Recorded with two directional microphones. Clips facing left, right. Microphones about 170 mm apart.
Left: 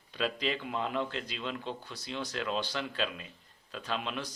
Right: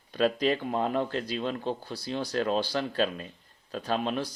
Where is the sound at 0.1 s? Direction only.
45° right (ahead or behind).